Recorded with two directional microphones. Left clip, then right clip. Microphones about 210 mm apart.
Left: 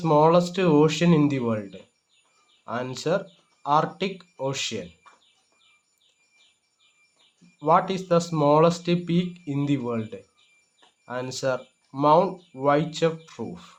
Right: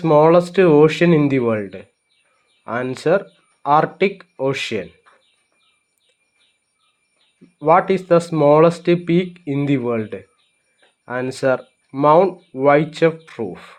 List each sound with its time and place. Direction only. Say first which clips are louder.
0.0 s speech: right 6 dB; 20° right (ahead or behind)
2.9 s speech: right 9 dB; 25° right (ahead or behind)
7.6 s speech: right 7 dB; 25° right (ahead or behind)